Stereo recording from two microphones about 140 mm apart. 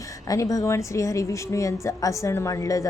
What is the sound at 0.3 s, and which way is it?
A woman's voice, 25° left (ahead or behind).